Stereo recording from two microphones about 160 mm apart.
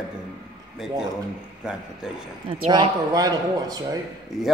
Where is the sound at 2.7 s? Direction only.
25° right (ahead or behind).